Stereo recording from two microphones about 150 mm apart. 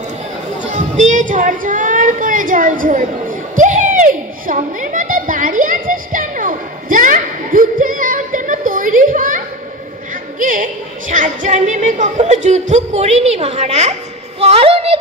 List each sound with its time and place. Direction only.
0.7 s music: 55° right (ahead or behind)
10.4 s a woman's voice: 60° right (ahead or behind)
14.4 s a sound: 40° right (ahead or behind)